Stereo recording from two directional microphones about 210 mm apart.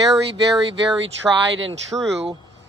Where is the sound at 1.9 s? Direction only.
15° right (ahead or behind).